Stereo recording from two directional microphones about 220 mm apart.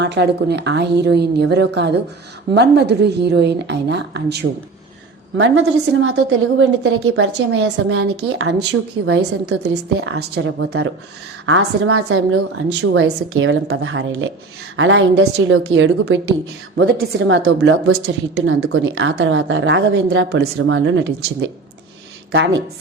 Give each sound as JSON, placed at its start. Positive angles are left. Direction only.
{"t": 0.0, "sound": "a woman's voice", "side_deg": -50}
{"t": 5.4, "sound": "a woman's voice", "side_deg": -65}
{"t": 8.1, "sound": "a woman's voice", "side_deg": -50}
{"t": 9.6, "sound": "a woman's voice", "side_deg": -65}
{"t": 10.4, "sound": "a woman's voice", "side_deg": -55}